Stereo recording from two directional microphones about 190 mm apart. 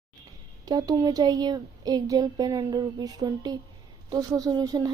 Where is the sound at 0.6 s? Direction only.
20° right (ahead or behind).